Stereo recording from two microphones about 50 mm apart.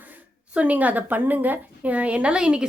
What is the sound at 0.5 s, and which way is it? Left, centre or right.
A woman's voice, right.